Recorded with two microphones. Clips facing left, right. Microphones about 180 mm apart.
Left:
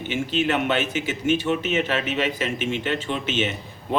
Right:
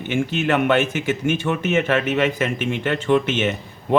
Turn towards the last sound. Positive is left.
turn(degrees=-55)  # may be behind; listen again after turning